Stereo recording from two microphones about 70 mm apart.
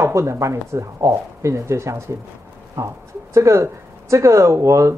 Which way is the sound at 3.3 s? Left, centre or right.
Right.